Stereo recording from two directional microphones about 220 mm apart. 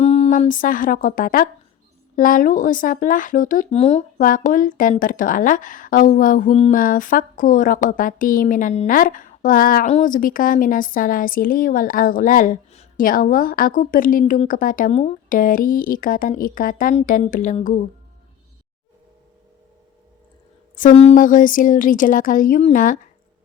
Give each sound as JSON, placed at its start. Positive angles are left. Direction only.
{"t": 0.0, "sound": "speech", "side_deg": 30}
{"t": 20.7, "sound": "speech", "side_deg": 30}